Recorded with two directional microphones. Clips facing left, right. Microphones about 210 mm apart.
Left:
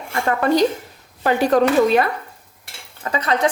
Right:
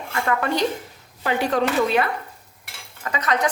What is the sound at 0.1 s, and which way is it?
A woman's voice, 35° left (ahead or behind).